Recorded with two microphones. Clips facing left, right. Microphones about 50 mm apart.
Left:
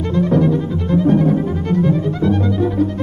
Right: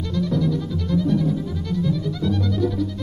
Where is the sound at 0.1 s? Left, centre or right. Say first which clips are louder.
Left 7 dB; left.